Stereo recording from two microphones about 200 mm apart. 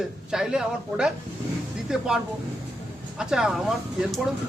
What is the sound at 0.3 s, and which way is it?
A man's voice, 5° right (ahead or behind).